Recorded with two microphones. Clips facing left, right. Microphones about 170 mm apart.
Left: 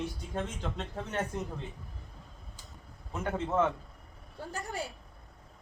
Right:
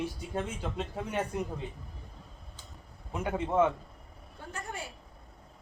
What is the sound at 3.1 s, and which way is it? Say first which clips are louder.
Speech: right 2 dB; 10° right (ahead or behind).